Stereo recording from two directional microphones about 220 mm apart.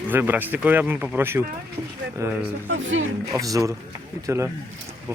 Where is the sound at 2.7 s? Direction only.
60° right (ahead or behind).